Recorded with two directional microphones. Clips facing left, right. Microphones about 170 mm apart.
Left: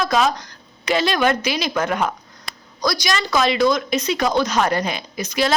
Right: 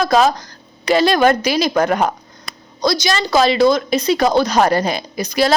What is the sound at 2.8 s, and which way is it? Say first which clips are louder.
A woman's voice: right 4 dB; 25° right (ahead or behind).